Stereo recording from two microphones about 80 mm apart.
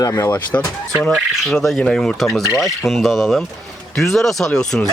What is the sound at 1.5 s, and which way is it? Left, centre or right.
Chicken, centre.